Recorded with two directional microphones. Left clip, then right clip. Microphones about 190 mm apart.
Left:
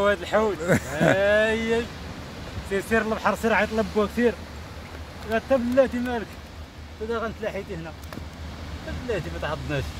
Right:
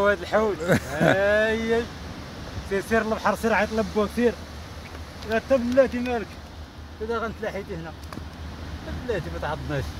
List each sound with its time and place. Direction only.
0.0 s speech: centre (ahead or behind)
5.3 s speech: 20° right (ahead or behind)
7.1 s speech: 5° right (ahead or behind)
9.1 s speech: centre (ahead or behind)